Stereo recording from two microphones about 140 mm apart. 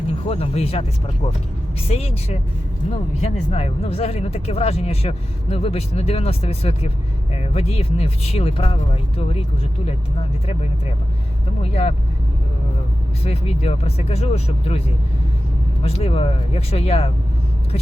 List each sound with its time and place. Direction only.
0.3 s speech: 45° left (ahead or behind)
13.2 s speech: 45° left (ahead or behind)
15.8 s speech: 45° left (ahead or behind)